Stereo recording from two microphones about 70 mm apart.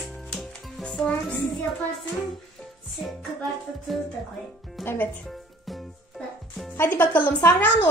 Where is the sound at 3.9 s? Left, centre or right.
Centre.